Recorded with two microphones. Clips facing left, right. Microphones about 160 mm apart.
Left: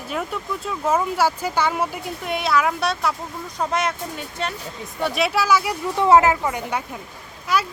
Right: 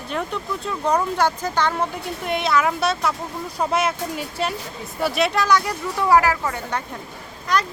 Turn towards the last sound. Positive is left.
turn(degrees=5)  # may be behind; listen again after turning